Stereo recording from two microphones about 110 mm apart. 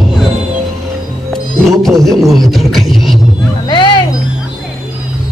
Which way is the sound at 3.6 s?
45° left (ahead or behind).